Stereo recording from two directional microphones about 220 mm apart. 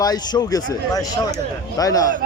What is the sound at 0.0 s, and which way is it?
Speech, 15° left (ahead or behind).